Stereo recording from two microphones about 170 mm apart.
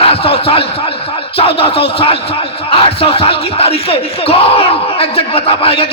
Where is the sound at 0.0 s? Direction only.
35° left (ahead or behind).